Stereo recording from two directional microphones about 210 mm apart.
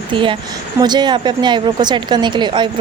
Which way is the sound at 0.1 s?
25° right (ahead or behind).